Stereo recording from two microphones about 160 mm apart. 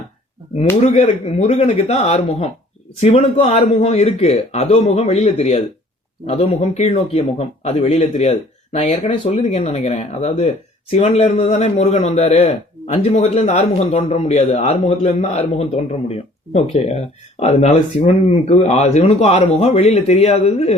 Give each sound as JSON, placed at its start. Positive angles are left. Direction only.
{"t": 0.8, "sound": "speech", "side_deg": 40}